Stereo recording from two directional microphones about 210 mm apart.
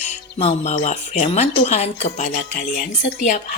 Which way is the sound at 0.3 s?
30° left (ahead or behind).